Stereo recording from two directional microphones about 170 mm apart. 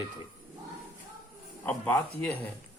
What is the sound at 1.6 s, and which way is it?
Speech, 10° left (ahead or behind).